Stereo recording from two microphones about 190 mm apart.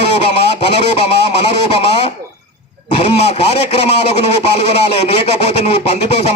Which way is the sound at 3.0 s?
35° left (ahead or behind).